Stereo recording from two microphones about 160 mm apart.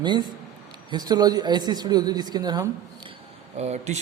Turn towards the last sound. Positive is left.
turn(degrees=-45)  # may be behind; listen again after turning